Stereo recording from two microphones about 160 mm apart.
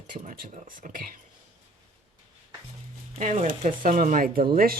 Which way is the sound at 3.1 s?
45° right (ahead or behind).